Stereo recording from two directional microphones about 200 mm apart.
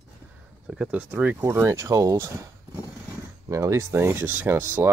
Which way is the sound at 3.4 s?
15° right (ahead or behind).